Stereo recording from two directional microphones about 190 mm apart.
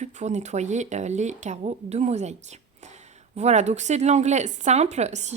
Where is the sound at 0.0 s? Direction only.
40° right (ahead or behind).